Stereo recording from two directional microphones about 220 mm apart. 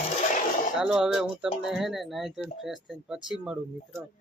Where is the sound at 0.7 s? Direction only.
Centre (ahead or behind).